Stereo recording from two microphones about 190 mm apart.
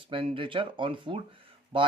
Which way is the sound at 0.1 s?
25° right (ahead or behind).